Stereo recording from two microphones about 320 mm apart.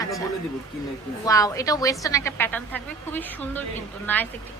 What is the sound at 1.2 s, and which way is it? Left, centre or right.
A woman's voice, centre.